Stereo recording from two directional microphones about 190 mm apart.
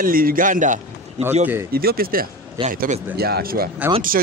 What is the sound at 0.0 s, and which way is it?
Speech, 50° right (ahead or behind).